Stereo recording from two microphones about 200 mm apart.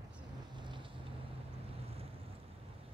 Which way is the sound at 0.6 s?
25° right (ahead or behind).